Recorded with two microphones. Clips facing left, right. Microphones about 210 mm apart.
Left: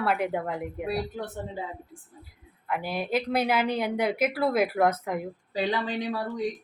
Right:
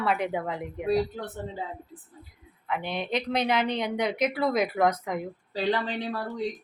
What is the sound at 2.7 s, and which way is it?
A woman's voice, 5° left (ahead or behind).